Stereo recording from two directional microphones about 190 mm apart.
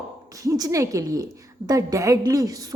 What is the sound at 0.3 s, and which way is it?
A woman's voice, 15° right (ahead or behind).